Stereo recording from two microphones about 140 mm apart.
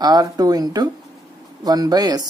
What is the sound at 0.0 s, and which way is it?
Speech, 30° right (ahead or behind).